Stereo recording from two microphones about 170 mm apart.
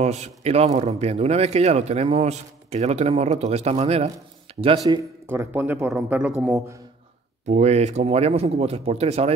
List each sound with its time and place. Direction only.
0.0 s speech: 40° right (ahead or behind)
4.5 s a sound: 35° right (ahead or behind)
4.8 s speech: 15° right (ahead or behind)
7.4 s speech: 40° right (ahead or behind)